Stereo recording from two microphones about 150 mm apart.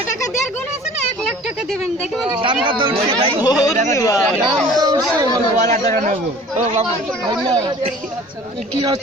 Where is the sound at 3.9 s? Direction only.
20° left (ahead or behind).